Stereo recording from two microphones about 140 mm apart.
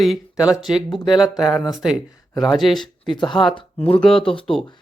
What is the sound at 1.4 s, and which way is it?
Speech, 25° left (ahead or behind).